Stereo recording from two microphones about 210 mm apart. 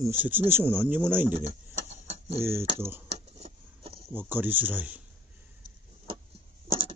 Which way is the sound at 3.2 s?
30° right (ahead or behind).